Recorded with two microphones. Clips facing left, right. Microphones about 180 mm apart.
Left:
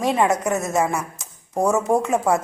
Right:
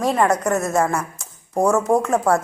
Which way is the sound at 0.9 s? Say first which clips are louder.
Right 2 dB; 15° left (ahead or behind).